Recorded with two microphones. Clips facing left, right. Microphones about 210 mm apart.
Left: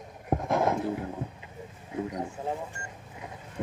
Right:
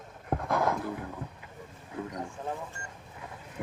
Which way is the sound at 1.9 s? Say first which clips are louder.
Left 4 dB; 15° left (ahead or behind).